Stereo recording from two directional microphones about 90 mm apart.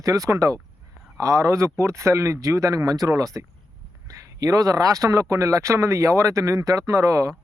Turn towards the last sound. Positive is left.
turn(degrees=-35)  # may be behind; listen again after turning